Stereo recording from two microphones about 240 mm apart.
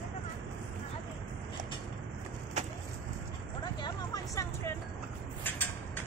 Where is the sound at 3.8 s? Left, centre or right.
Centre.